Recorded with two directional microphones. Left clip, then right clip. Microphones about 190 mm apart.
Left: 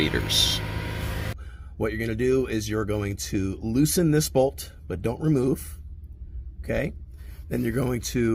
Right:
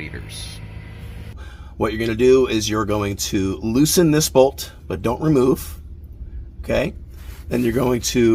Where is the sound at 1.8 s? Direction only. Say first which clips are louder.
Right 9 dB; 55° left (ahead or behind).